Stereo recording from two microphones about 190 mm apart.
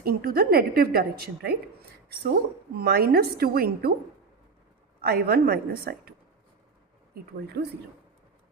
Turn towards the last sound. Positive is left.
turn(degrees=-60)  # may be behind; listen again after turning